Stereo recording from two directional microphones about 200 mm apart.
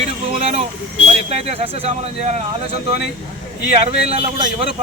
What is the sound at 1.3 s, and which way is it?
Speech, 30° right (ahead or behind).